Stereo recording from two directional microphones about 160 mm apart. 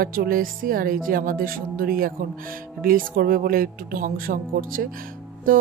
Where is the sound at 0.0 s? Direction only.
65° right (ahead or behind).